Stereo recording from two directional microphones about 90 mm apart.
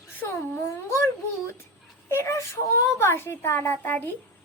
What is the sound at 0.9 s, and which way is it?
A child's voice, 35° left (ahead or behind).